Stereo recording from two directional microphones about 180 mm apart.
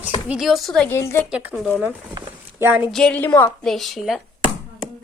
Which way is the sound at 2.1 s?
20° right (ahead or behind).